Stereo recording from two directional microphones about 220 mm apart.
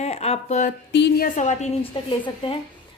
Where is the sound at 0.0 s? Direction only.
30° left (ahead or behind).